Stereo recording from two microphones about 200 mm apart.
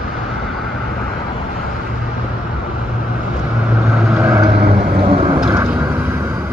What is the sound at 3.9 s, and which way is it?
Vehicle, centre (ahead or behind).